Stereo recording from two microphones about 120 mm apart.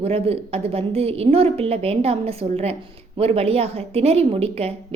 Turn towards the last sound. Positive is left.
turn(degrees=-60)  # may be behind; listen again after turning